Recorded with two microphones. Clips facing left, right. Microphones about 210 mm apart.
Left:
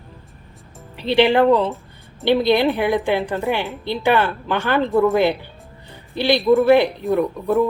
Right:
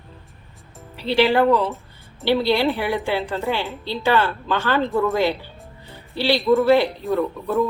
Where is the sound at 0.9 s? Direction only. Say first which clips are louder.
Left 2 dB; 20° left (ahead or behind).